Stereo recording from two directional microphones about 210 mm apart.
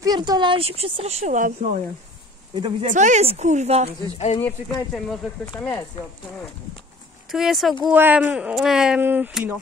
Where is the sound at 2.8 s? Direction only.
35° right (ahead or behind).